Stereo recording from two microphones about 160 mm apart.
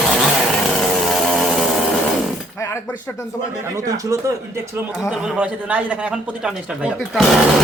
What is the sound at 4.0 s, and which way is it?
Speech, 20° right (ahead or behind).